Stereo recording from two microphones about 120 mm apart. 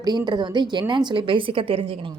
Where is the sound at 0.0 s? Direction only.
35° right (ahead or behind).